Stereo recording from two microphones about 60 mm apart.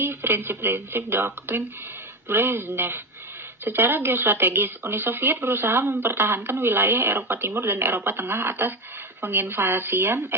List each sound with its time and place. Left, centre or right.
0.0 s speech: right